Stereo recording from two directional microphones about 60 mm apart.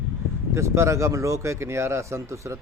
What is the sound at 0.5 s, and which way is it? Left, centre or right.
Speech, right.